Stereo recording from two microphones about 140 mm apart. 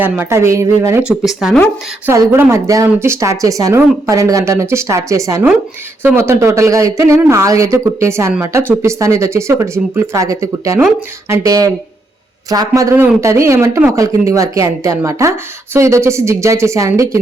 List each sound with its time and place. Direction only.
0.0 s speech: 15° right (ahead or behind)
1.0 s speech: 5° right (ahead or behind)
2.0 s speech: 15° right (ahead or behind)